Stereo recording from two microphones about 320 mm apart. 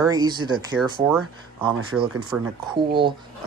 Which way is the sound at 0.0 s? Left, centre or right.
Centre.